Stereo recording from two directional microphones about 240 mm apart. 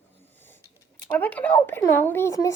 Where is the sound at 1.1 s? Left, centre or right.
Centre.